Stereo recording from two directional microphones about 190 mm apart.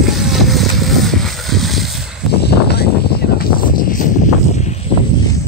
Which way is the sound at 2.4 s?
60° left (ahead or behind).